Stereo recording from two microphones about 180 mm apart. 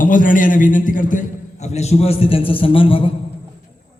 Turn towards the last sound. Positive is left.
turn(degrees=30)  # may be behind; listen again after turning